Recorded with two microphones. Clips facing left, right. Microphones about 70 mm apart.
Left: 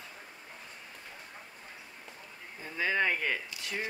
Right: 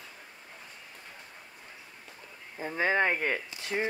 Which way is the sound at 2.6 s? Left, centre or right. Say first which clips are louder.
Right 3 dB; right.